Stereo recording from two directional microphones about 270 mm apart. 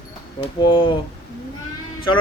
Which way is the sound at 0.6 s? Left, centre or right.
Centre.